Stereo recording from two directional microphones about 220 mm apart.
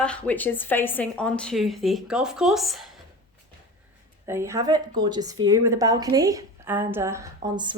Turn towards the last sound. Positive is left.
turn(degrees=-20)  # may be behind; listen again after turning